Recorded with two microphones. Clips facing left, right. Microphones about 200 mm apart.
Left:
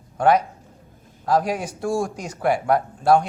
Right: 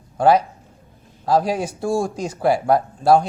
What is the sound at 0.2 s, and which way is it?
A man's voice, 30° right (ahead or behind).